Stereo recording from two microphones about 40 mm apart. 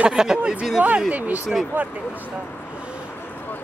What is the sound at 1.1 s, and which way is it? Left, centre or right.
Speech, right.